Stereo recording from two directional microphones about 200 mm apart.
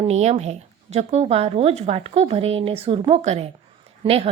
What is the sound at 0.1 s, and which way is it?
A woman's voice, 35° right (ahead or behind).